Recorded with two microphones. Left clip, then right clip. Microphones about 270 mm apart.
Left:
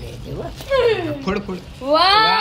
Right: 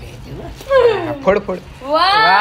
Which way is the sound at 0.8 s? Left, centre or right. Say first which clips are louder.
Right 5 dB; centre.